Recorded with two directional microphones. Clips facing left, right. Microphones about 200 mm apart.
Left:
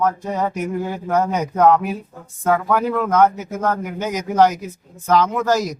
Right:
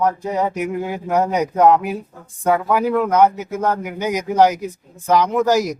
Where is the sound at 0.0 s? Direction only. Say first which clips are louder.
Right 1 dB; 15° right (ahead or behind).